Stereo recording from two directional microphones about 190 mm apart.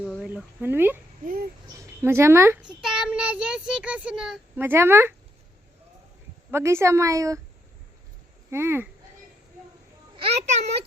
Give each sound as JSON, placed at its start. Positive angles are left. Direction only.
{"t": 0.2, "sound": "speech", "side_deg": -5}
{"t": 1.2, "sound": "a sound", "side_deg": -50}
{"t": 2.0, "sound": "child singing", "side_deg": -15}
{"t": 6.5, "sound": "a woman's voice", "side_deg": -15}
{"t": 8.4, "sound": "a woman's voice", "side_deg": -15}
{"t": 10.2, "sound": "a child's voice", "side_deg": -30}